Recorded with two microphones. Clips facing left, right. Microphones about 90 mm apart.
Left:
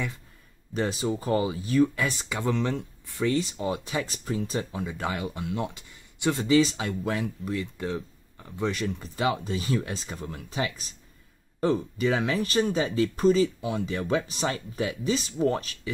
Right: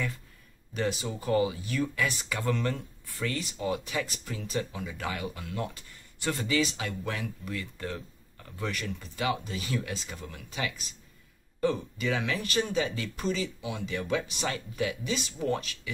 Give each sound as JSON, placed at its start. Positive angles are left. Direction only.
{"t": 0.7, "sound": "speech", "side_deg": 35}
{"t": 2.2, "sound": "speech", "side_deg": 20}
{"t": 7.5, "sound": "speech", "side_deg": 20}